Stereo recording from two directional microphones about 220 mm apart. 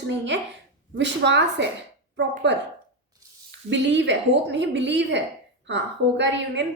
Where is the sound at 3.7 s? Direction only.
55° right (ahead or behind).